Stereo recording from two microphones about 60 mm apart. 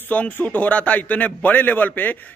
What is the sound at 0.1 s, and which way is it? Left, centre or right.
A man's voice, left.